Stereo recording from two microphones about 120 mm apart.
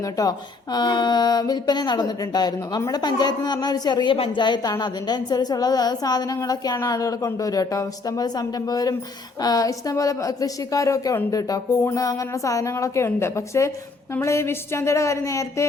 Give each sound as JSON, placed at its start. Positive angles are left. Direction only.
{"t": 0.0, "sound": "a woman's voice", "side_deg": 30}